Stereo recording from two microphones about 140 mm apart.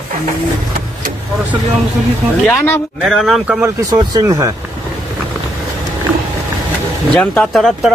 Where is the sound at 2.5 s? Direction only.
20° left (ahead or behind).